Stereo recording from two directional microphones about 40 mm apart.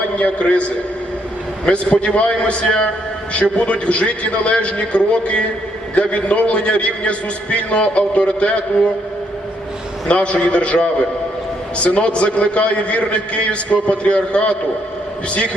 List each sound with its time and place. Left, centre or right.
0.2 s a man's voice: left
1.6 s a man's voice: left
10.1 s a man's voice: left